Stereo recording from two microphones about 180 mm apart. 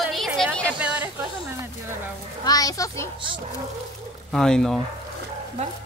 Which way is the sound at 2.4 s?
20° left (ahead or behind).